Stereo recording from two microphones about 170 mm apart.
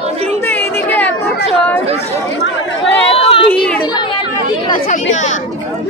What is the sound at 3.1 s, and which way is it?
Chatter, 35° left (ahead or behind).